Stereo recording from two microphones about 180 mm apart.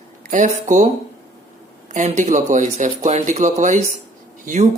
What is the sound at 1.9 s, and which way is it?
Speech, 40° right (ahead or behind).